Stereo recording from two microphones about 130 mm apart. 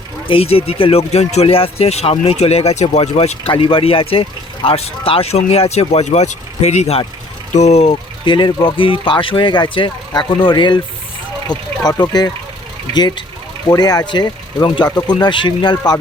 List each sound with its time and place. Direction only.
0.3 s speech: 45° left (ahead or behind)
8.2 s speech: 35° left (ahead or behind)